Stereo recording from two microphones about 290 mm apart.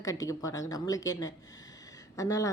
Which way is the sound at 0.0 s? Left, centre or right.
Centre.